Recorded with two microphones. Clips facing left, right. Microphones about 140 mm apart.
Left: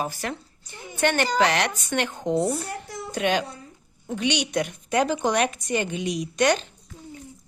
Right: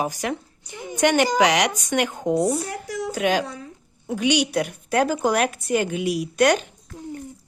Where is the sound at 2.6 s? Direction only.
80° right.